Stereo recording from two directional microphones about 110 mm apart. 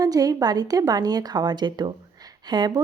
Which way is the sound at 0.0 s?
35° right (ahead or behind).